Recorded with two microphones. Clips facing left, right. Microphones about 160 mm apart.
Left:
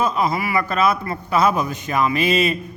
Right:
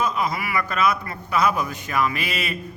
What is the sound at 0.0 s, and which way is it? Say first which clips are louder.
A man's voice: left 4 dB; 30° left (ahead or behind).